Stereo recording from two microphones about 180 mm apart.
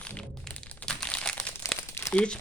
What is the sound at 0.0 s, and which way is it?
Crumpling, 5° left (ahead or behind).